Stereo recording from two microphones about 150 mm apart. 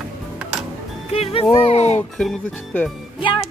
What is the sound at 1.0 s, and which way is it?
Music, 45° left (ahead or behind).